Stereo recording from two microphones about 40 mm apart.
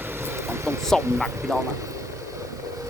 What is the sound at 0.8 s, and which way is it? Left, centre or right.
Speech, centre.